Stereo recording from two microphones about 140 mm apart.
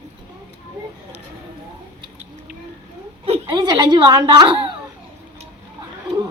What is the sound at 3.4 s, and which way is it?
A woman's voice, 30° right (ahead or behind).